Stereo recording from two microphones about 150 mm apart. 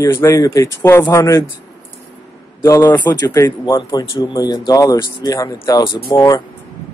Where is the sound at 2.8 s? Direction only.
30° left (ahead or behind).